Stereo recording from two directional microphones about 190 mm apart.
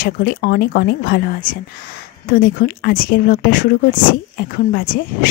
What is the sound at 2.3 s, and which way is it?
A woman's voice, 55° left (ahead or behind).